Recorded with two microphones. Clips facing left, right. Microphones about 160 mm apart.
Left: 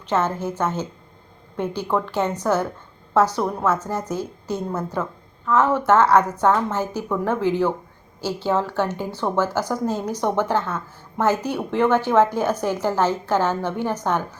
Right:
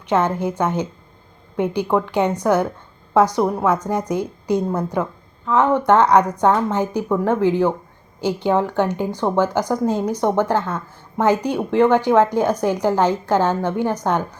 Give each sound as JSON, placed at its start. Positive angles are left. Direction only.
{"t": 0.0, "sound": "a woman's voice", "side_deg": -15}